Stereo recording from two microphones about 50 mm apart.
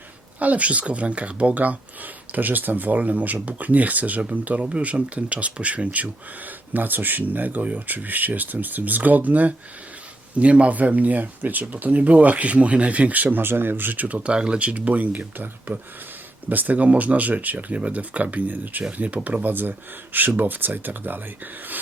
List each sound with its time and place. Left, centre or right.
0.3 s speech: right
14.3 s speech: right